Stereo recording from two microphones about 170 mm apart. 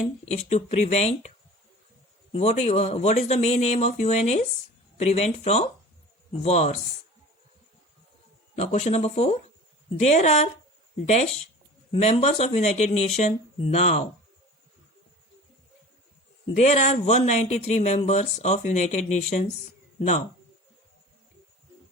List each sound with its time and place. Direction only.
0.3 s speech: 40° left (ahead or behind)
2.3 s speech: 40° left (ahead or behind)
8.5 s speech: 40° left (ahead or behind)
16.6 s speech: 40° left (ahead or behind)